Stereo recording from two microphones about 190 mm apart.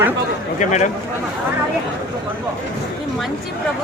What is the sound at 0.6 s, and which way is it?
Speech, 40° left (ahead or behind).